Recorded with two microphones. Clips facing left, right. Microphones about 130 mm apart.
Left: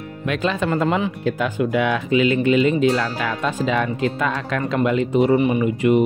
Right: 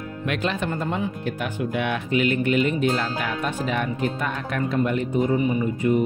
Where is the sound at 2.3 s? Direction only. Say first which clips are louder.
Left 5 dB; 90° left.